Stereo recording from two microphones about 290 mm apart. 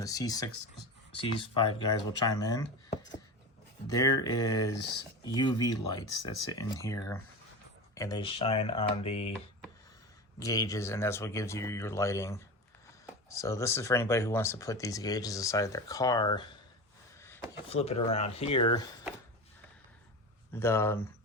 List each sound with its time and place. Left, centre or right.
0.0 s speech: centre
10.4 s speech: centre
17.2 s a sound: centre
17.7 s speech: left
20.5 s speech: centre